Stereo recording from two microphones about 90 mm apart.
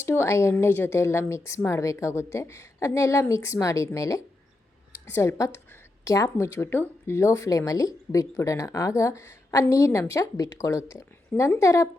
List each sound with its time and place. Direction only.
0.0 s a woman's voice: 30° left (ahead or behind)
5.0 s a woman's voice: 25° left (ahead or behind)
6.1 s a woman's voice: 35° left (ahead or behind)